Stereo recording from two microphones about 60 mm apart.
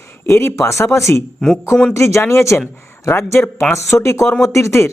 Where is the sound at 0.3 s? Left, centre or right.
Left.